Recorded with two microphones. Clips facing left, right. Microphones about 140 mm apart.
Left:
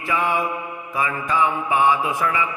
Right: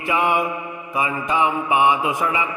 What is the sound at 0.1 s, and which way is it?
Mantra, 15° right (ahead or behind).